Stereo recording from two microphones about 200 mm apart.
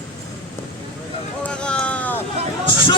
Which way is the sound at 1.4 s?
5° left (ahead or behind).